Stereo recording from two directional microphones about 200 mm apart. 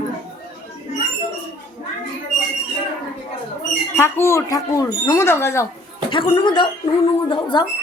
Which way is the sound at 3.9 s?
15° left (ahead or behind).